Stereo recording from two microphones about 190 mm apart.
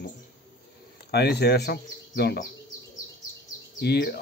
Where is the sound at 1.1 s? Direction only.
60° left (ahead or behind).